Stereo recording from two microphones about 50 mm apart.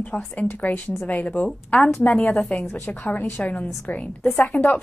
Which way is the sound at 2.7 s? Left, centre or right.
Left.